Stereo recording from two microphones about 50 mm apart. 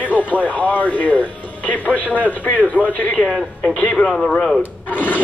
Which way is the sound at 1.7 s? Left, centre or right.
Left.